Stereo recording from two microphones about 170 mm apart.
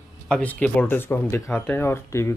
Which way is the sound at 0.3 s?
10° left (ahead or behind).